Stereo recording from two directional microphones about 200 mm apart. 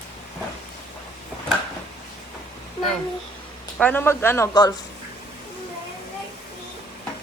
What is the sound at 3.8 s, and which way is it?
Speech, 10° left (ahead or behind).